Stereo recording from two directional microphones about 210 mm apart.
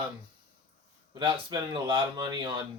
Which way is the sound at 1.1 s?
25° right (ahead or behind).